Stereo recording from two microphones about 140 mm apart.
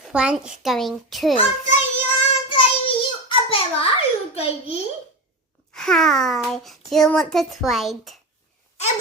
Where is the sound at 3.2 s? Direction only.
40° left (ahead or behind).